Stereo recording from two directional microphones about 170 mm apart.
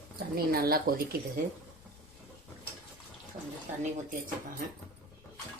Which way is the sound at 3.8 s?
50° right (ahead or behind).